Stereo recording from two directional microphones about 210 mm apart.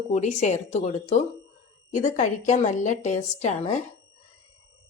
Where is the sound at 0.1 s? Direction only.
35° left (ahead or behind).